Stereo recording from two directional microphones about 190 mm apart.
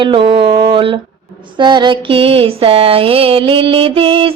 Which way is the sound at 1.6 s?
25° right (ahead or behind).